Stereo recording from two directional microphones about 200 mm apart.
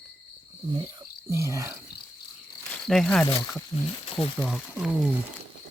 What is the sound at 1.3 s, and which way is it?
Speech, 15° right (ahead or behind).